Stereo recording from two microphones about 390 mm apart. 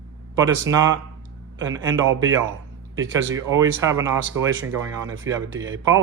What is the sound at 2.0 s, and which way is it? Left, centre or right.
Speech, right.